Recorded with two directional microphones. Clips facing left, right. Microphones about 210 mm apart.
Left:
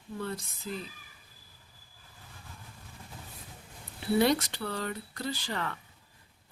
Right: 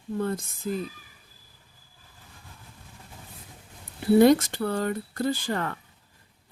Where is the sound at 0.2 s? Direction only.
50° right (ahead or behind).